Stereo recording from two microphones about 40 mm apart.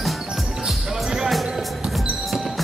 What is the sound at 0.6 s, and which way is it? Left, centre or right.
Music, centre.